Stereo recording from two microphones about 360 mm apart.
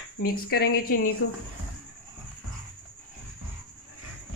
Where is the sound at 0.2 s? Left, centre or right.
Left.